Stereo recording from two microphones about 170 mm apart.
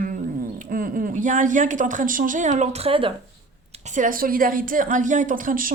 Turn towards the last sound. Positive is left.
turn(degrees=-55)  # may be behind; listen again after turning